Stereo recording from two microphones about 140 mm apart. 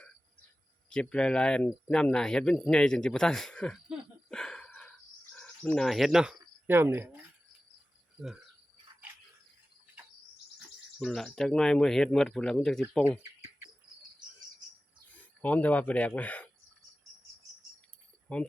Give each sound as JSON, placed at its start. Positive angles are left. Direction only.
{"t": 0.9, "sound": "speech", "side_deg": 5}
{"t": 3.8, "sound": "wheeze", "side_deg": 5}
{"t": 5.3, "sound": "speech", "side_deg": 5}
{"t": 6.7, "sound": "speech", "side_deg": -15}
{"t": 11.0, "sound": "speech", "side_deg": 5}
{"t": 15.4, "sound": "speech", "side_deg": 10}
{"t": 18.3, "sound": "speech", "side_deg": 10}